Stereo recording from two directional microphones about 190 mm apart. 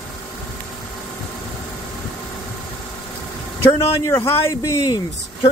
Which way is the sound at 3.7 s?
15° left (ahead or behind).